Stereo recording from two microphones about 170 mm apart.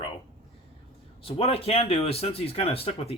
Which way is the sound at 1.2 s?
35° left (ahead or behind).